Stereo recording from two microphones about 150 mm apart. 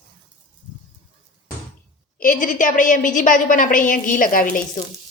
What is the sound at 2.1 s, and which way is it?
A woman's voice, 65° left (ahead or behind).